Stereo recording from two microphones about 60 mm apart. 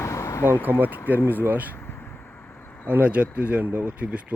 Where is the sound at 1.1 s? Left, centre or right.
Right.